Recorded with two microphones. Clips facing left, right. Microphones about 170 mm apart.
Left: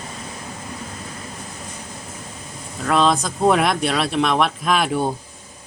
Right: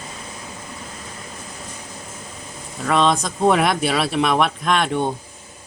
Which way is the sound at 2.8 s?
Centre (ahead or behind).